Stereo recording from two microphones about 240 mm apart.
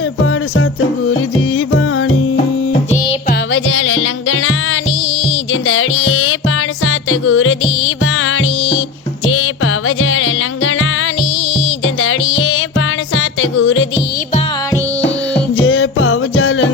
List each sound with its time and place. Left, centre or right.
0.5 s music: left
2.9 s music: left
3.5 s music: left
12.4 s music: left
15.5 s music: left